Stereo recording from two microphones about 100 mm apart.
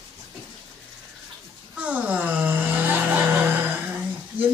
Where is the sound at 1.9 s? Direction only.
15° right (ahead or behind).